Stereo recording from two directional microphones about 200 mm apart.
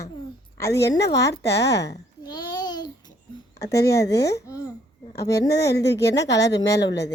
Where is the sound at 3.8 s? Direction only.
15° left (ahead or behind).